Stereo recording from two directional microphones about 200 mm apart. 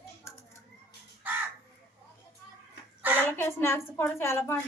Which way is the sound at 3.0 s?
10° right (ahead or behind).